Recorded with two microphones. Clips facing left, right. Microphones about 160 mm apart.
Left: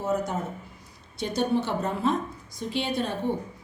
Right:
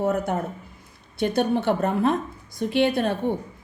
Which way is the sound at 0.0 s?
60° right (ahead or behind).